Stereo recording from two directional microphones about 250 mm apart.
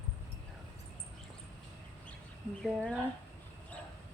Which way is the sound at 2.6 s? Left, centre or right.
Centre.